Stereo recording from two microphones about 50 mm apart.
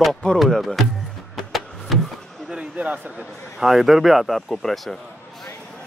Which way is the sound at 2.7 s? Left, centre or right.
Right.